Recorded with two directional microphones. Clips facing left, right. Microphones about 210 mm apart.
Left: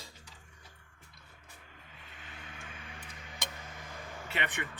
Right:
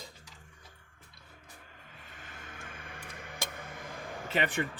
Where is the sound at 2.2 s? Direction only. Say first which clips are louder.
Right 1 dB; 45° right (ahead or behind).